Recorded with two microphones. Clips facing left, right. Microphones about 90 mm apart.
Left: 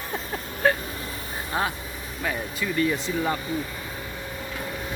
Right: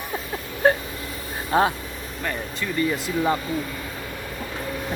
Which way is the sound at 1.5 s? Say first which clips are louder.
Right 7 dB; 30° right (ahead or behind).